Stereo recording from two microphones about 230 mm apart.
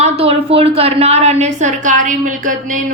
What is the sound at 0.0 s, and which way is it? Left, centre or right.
A woman's voice, right.